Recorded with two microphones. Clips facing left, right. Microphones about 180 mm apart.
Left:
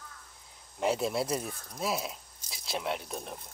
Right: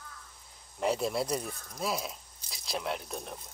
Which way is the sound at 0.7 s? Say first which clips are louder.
Left 1 dB; centre (ahead or behind).